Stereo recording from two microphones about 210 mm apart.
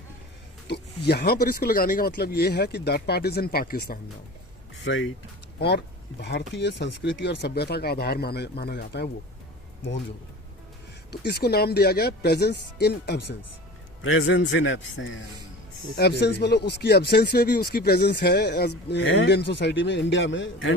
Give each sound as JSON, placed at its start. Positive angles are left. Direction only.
{"t": 0.7, "sound": "speech", "side_deg": 50}
{"t": 4.8, "sound": "speech", "side_deg": 65}
{"t": 5.5, "sound": "speech", "side_deg": 50}
{"t": 11.3, "sound": "speech", "side_deg": 50}
{"t": 14.0, "sound": "a man's voice", "side_deg": 70}
{"t": 16.2, "sound": "a man's voice", "side_deg": 55}